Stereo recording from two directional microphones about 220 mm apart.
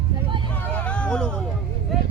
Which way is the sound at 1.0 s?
5° left (ahead or behind).